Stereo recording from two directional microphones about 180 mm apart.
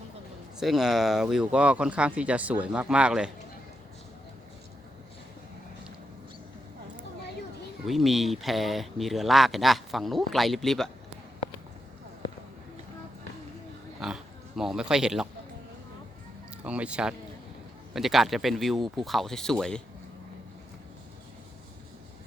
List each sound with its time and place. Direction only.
0.6 s speech: centre (ahead or behind)
7.9 s speech: centre (ahead or behind)
14.0 s speech: centre (ahead or behind)
16.6 s speech: 5° right (ahead or behind)